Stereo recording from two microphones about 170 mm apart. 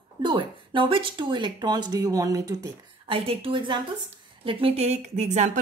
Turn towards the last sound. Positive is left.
turn(degrees=-40)  # may be behind; listen again after turning